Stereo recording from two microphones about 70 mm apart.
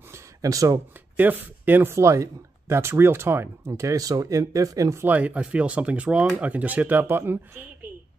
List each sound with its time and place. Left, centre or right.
0.1 s a sound: right
1.1 s speech: right
2.0 s speech: right
4.9 s speech: right